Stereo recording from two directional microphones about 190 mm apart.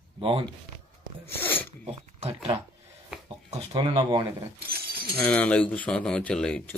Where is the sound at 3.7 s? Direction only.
20° right (ahead or behind).